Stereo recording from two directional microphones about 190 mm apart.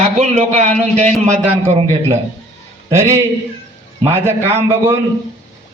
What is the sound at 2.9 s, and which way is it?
A man's voice, 15° right (ahead or behind).